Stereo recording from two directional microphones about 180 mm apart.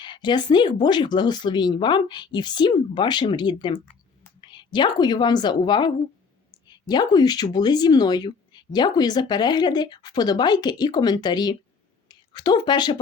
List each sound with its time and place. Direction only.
0.0 s speech: 25° left (ahead or behind)